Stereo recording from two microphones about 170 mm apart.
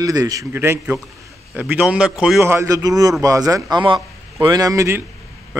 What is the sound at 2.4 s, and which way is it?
A man's voice, 20° right (ahead or behind).